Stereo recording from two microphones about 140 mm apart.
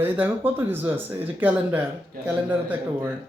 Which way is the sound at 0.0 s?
15° right (ahead or behind).